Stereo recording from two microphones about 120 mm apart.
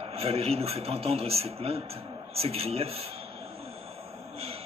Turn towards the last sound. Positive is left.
turn(degrees=-55)  # may be behind; listen again after turning